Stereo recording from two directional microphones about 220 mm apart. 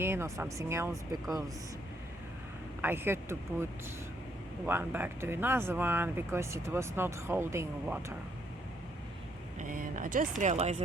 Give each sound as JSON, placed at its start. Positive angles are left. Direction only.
{"t": 0.0, "sound": "speech", "side_deg": -10}
{"t": 2.8, "sound": "speech", "side_deg": -10}
{"t": 9.6, "sound": "speech", "side_deg": -40}